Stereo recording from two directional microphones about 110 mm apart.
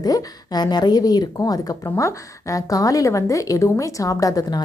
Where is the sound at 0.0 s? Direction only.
35° left (ahead or behind).